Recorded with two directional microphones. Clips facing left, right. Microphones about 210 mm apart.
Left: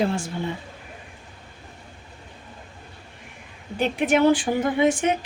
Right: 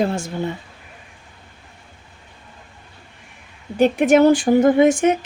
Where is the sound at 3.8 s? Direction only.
45° right (ahead or behind).